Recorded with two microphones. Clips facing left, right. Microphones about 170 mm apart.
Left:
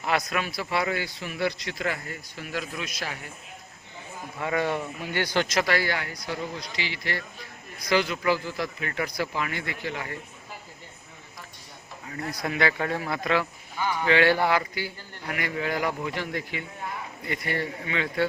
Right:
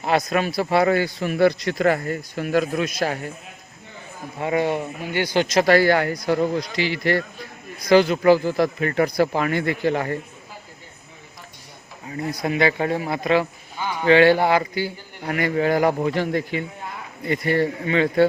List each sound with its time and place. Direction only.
0.0 s a man's voice: 35° right (ahead or behind)
4.4 s speech: 20° right (ahead or behind)
5.6 s a man's voice: 45° right (ahead or behind)
7.9 s a man's voice: 35° right (ahead or behind)
12.0 s a man's voice: 20° right (ahead or behind); by 18.3 s 35° right (ahead or behind)